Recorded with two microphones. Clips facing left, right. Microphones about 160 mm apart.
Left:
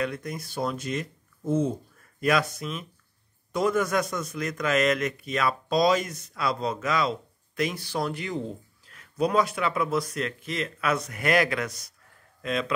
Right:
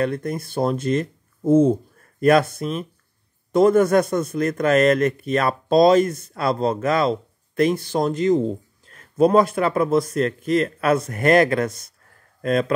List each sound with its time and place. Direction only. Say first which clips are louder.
0.0 s a man's voice: right 7 dB; 50° right (ahead or behind)